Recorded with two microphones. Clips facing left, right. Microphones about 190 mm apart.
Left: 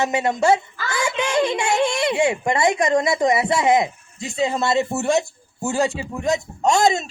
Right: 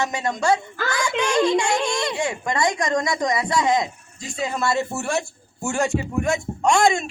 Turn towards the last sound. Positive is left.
turn(degrees=25)  # may be behind; listen again after turning